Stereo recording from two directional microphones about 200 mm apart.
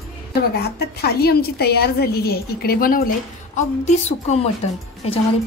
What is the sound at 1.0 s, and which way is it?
A woman's voice, 50° left (ahead or behind).